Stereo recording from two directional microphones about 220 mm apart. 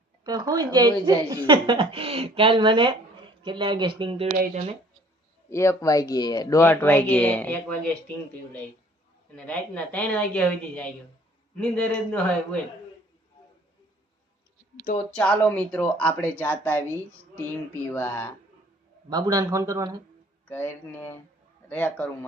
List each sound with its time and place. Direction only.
0.3 s a man's voice: 15° right (ahead or behind)
5.5 s speech: 15° left (ahead or behind)
9.3 s a woman's voice: 5° left (ahead or behind)
15.1 s speech: 5° left (ahead or behind)
17.9 s speech: 10° left (ahead or behind)
19.1 s a man's voice: 15° right (ahead or behind)
20.5 s speech: 10° left (ahead or behind)